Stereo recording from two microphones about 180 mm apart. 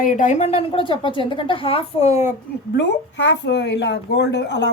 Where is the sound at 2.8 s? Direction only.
70° left (ahead or behind).